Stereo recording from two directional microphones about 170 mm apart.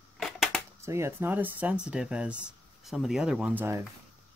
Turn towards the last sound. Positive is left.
turn(degrees=-15)  # may be behind; listen again after turning